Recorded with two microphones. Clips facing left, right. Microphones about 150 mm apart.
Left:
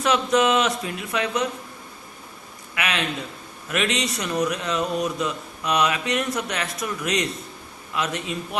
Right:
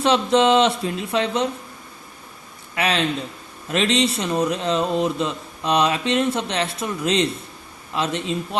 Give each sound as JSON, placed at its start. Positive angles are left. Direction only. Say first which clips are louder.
{"t": 0.0, "sound": "speech", "louder": "right 3 dB", "side_deg": -30}
{"t": 2.7, "sound": "speech", "louder": "right 5 dB", "side_deg": -30}